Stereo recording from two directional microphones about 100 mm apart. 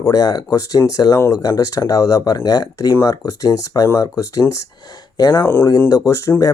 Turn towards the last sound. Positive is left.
turn(degrees=30)  # may be behind; listen again after turning